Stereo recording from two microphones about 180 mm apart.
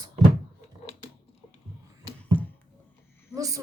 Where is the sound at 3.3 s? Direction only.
20° right (ahead or behind).